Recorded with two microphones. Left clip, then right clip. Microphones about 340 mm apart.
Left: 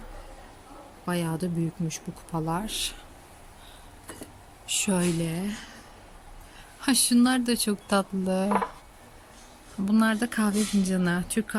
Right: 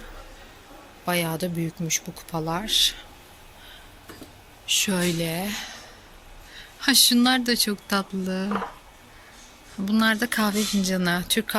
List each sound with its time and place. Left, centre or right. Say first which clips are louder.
1.0 s speech: right 5 dB; centre
4.7 s speech: right 4 dB; centre
6.7 s speech: right 5 dB; centre
9.8 s speech: right 3 dB; centre